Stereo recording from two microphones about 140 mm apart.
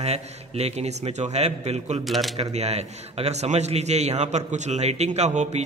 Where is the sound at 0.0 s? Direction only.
50° right (ahead or behind).